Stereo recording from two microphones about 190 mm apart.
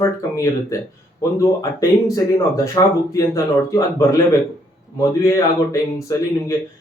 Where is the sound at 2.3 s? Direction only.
15° left (ahead or behind).